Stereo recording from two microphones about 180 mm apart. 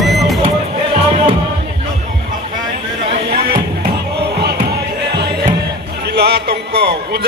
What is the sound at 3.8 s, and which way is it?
Music, 65° right (ahead or behind).